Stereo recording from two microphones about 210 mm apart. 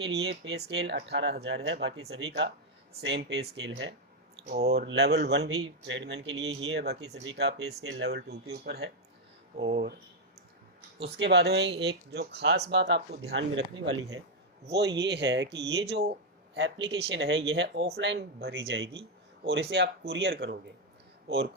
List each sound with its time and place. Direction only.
0.0 s speech: 55° right (ahead or behind)
11.2 s speech: 55° right (ahead or behind)
14.7 s speech: 55° right (ahead or behind)
18.5 s a man's voice: 65° right (ahead or behind)
19.5 s speech: 55° right (ahead or behind)